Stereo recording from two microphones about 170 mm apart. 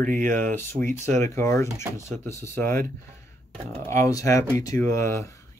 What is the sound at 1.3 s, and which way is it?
Speech, 15° left (ahead or behind).